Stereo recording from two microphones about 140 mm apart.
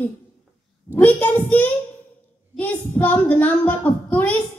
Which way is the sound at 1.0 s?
10° left (ahead or behind).